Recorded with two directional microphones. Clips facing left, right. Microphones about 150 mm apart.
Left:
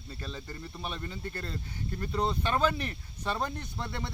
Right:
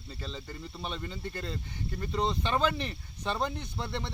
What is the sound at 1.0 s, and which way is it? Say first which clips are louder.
Speech: right 1 dB; 10° right (ahead or behind).